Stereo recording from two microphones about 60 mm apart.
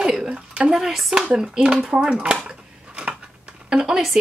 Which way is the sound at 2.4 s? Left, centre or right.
Centre.